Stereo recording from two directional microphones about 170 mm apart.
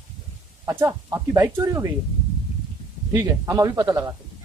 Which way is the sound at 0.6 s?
15° right (ahead or behind).